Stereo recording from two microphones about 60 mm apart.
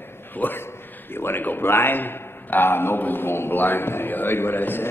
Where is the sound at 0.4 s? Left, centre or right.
Left.